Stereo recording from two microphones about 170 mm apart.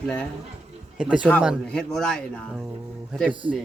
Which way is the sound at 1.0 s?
5° right (ahead or behind).